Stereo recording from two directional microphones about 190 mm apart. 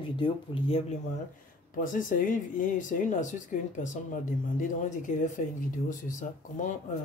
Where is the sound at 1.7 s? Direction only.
45° left (ahead or behind).